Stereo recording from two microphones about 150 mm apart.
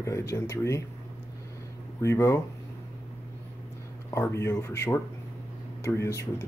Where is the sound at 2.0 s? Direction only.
20° left (ahead or behind).